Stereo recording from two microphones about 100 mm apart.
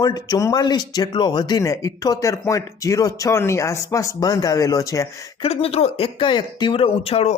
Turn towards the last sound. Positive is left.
turn(degrees=75)  # may be behind; listen again after turning